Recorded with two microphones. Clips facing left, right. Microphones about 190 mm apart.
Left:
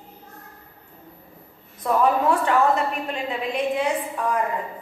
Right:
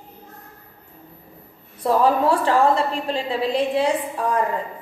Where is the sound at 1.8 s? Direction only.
30° right (ahead or behind).